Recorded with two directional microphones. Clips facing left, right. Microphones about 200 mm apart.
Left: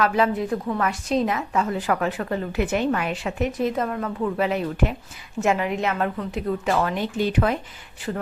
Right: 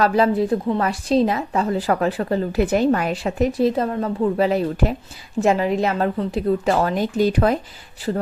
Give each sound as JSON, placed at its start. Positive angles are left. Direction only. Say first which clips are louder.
{"t": 0.0, "sound": "a woman's voice", "louder": "right 4 dB", "side_deg": -35}